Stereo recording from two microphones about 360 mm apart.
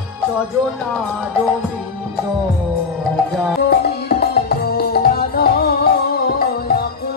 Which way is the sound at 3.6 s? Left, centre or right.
Left.